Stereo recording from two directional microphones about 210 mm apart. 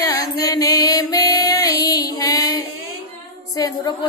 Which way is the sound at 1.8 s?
15° left (ahead or behind).